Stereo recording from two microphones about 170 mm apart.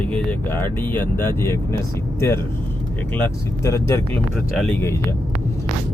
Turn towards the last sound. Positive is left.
turn(degrees=10)  # may be behind; listen again after turning